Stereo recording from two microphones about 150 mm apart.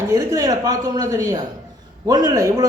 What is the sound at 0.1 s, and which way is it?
A woman's voice, 25° right (ahead or behind).